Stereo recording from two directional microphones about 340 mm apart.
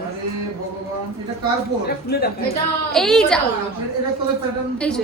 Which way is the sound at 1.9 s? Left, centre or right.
Left.